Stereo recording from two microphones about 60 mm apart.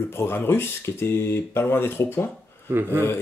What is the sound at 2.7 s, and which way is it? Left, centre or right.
Speech, right.